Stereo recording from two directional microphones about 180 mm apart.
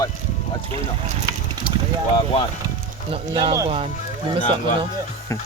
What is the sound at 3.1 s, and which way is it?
Speech, 30° right (ahead or behind).